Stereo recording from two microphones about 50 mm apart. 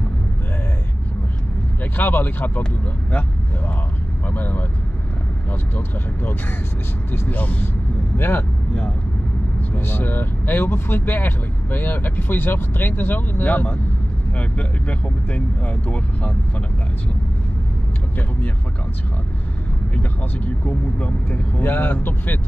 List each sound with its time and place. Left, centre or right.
2.0 s speech: left
4.3 s speech: left
9.8 s speech: left
20.0 s speech: left